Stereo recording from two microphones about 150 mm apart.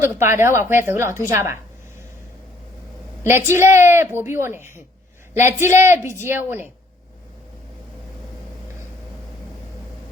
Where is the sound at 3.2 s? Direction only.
15° right (ahead or behind).